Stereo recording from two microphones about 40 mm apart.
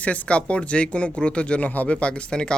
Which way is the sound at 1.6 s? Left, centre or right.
Left.